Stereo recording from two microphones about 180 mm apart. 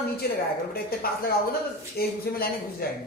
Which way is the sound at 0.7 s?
55° left (ahead or behind).